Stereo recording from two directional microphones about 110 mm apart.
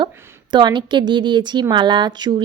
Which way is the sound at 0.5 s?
45° right (ahead or behind).